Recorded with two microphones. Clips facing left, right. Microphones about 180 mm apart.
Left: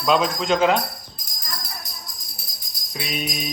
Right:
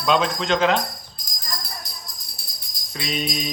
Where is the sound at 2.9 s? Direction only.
5° left (ahead or behind).